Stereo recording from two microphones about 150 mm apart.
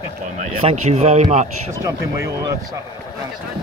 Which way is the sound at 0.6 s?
45° right (ahead or behind).